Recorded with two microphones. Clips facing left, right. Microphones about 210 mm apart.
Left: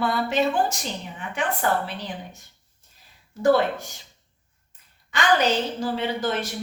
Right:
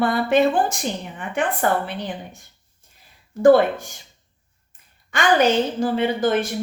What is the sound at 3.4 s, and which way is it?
Speech, 50° right (ahead or behind).